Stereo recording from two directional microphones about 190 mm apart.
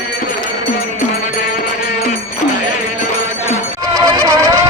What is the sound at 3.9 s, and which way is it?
Music, 20° right (ahead or behind).